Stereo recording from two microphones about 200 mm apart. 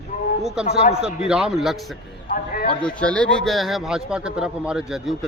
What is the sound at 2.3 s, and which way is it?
Speech, 45° left (ahead or behind).